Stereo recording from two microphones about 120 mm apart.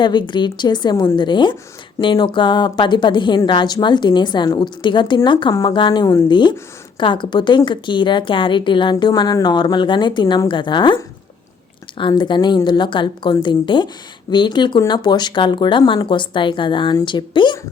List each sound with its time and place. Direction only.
0.0 s a woman's voice: 40° left (ahead or behind)